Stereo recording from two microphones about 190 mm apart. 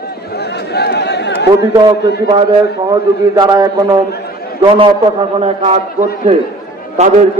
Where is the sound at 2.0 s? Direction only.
60° left (ahead or behind).